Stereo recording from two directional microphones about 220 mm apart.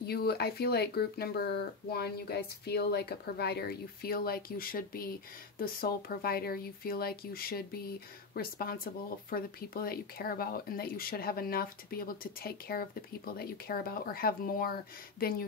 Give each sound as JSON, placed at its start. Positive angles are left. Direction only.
{"t": 0.0, "sound": "speech", "side_deg": 45}